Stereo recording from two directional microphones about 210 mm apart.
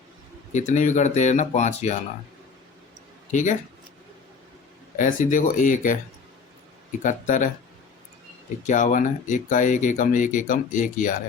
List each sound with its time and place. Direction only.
0.5 s speech: 35° left (ahead or behind)
4.9 s speech: 40° left (ahead or behind)
7.0 s speech: 35° left (ahead or behind)
8.6 s speech: 35° left (ahead or behind)